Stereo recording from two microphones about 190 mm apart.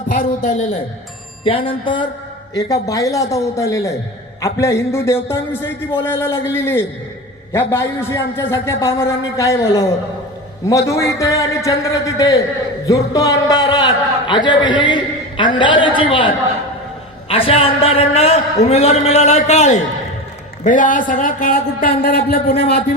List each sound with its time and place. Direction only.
0.1 s a man's voice: 40° left (ahead or behind)
1.5 s a man's voice: 30° left (ahead or behind); by 22.8 s 55° left (ahead or behind)